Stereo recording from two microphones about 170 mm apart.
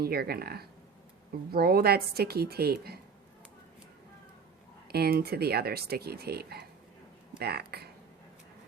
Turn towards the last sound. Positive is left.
turn(degrees=-70)  # may be behind; listen again after turning